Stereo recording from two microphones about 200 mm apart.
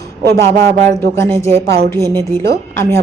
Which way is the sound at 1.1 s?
15° left (ahead or behind).